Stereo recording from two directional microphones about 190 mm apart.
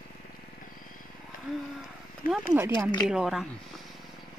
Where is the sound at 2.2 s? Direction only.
50° left (ahead or behind).